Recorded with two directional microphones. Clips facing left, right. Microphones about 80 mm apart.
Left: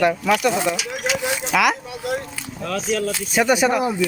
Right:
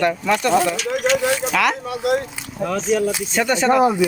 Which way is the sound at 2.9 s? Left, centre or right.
Centre.